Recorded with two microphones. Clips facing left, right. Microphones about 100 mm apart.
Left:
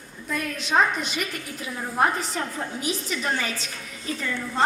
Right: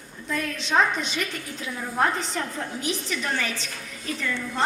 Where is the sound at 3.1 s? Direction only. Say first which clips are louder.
Left 1 dB; 25° left (ahead or behind).